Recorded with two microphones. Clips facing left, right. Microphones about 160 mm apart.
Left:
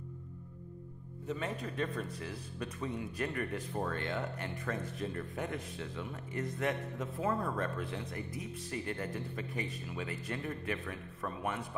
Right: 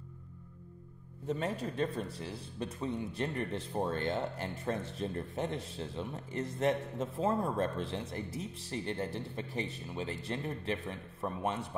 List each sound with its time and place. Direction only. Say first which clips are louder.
1.2 s a man's voice: right 3 dB; 35° right (ahead or behind)